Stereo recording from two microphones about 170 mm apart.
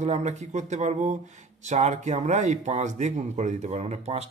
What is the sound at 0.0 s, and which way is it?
Speech, 40° right (ahead or behind).